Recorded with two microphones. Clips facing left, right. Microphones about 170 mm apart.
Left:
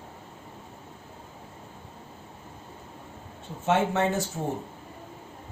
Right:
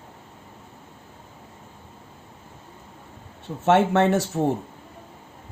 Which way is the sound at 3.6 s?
70° right (ahead or behind).